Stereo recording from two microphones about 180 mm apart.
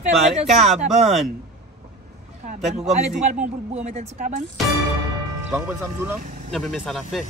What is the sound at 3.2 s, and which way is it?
Speech, 40° right (ahead or behind).